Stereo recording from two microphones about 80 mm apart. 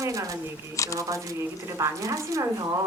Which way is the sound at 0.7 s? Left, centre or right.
Left.